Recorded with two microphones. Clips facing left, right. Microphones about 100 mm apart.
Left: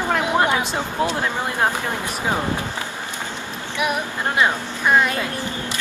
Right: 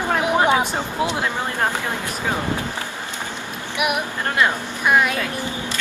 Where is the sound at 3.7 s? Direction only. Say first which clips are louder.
Even; 15° right (ahead or behind).